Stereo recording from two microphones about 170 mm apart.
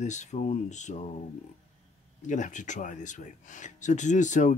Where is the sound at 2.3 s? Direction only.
45° left (ahead or behind).